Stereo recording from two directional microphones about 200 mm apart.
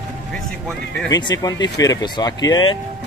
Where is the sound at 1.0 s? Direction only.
20° left (ahead or behind).